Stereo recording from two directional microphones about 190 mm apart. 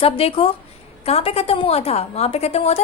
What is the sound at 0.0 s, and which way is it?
A woman's voice, 30° left (ahead or behind).